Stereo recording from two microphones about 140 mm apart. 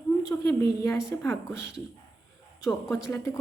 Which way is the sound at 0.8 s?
20° left (ahead or behind).